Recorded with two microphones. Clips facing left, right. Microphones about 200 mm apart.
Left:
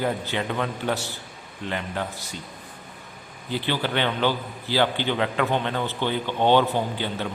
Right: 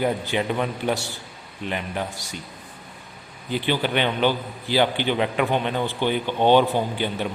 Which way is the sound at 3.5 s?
15° right (ahead or behind).